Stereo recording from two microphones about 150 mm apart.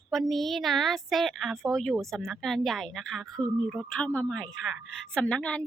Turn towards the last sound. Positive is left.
turn(degrees=5)  # may be behind; listen again after turning